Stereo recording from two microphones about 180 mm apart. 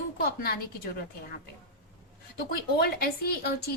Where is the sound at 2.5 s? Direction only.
60° left (ahead or behind).